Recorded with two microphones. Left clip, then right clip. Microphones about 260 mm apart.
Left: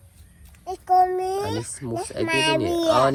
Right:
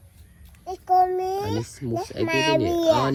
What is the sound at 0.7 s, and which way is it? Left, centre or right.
A child's voice, left.